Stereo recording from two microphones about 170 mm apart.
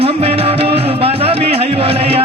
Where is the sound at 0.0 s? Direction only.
35° right (ahead or behind).